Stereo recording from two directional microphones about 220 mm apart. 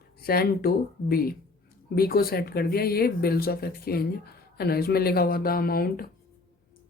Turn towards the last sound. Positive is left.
turn(degrees=40)  # may be behind; listen again after turning